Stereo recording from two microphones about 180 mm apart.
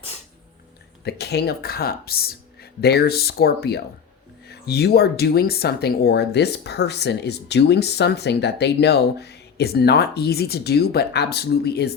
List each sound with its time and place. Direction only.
1.0 s speech: 65° left (ahead or behind)